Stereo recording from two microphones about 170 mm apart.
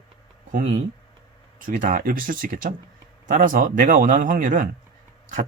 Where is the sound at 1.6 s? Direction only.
55° right (ahead or behind).